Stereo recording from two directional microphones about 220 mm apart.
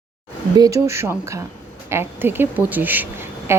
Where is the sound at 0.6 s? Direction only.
15° right (ahead or behind).